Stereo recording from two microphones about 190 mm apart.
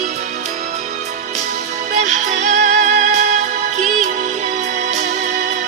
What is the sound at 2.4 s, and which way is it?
Music, 40° right (ahead or behind).